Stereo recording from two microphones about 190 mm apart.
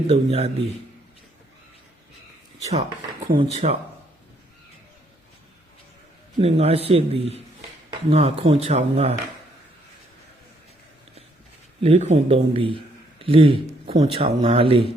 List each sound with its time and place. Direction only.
0.1 s speech: 30° right (ahead or behind)
3.3 s speech: 30° right (ahead or behind)
6.4 s speech: 35° right (ahead or behind)
11.8 s a man's voice: 35° right (ahead or behind)